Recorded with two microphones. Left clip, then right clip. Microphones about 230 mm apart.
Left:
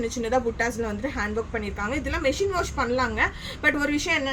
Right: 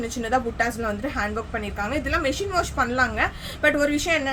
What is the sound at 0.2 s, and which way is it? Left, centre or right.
A woman's voice, centre.